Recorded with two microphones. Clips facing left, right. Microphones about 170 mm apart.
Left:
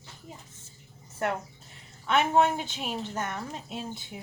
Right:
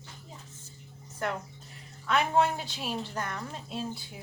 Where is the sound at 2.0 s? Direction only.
20° left (ahead or behind).